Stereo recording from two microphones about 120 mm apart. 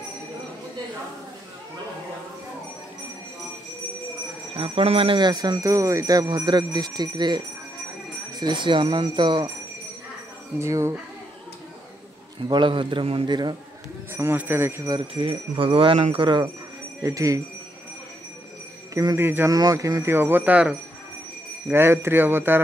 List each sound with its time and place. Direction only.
4.6 s a man's voice: 50° right (ahead or behind)
5.2 s speech: 35° right (ahead or behind)
10.6 s speech: 25° right (ahead or behind)
12.4 s a man's voice: 40° right (ahead or behind)
14.1 s speech: 15° right (ahead or behind)
14.9 s a man's voice: 45° right (ahead or behind)
17.0 s speech: 30° right (ahead or behind)
19.1 s speech: 20° right (ahead or behind)
19.5 s speech: 30° right (ahead or behind)